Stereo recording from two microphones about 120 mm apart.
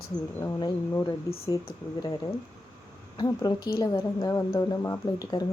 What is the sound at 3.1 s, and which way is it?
A woman's voice, 35° left (ahead or behind).